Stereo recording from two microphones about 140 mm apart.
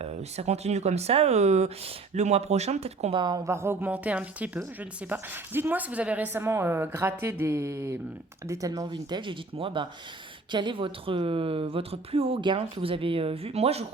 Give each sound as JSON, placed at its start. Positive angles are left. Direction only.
{"t": 0.0, "sound": "speech", "side_deg": -50}
{"t": 3.2, "sound": "a woman's voice", "side_deg": -30}